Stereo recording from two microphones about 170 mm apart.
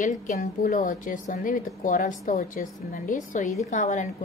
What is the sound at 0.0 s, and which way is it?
A woman's voice, 50° left (ahead or behind).